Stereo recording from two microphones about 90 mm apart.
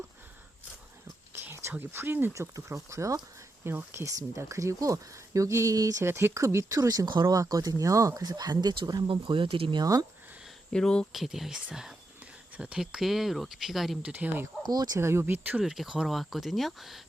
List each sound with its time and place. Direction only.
1.3 s a sound: 25° right (ahead or behind)
1.7 s speech: 25° right (ahead or behind)
2.3 s speech: 35° right (ahead or behind)
3.6 s speech: 25° right (ahead or behind); by 8.8 s 50° right (ahead or behind)
9.0 s speech: 70° right (ahead or behind)
9.8 s speech: 45° right (ahead or behind)
10.7 s speech: 10° left (ahead or behind)
11.1 s speech: centre (ahead or behind)
14.0 s speech: 15° right (ahead or behind)
14.6 s speech: 50° right (ahead or behind); by 15.6 s 20° right (ahead or behind)
15.6 s speech: 5° right (ahead or behind)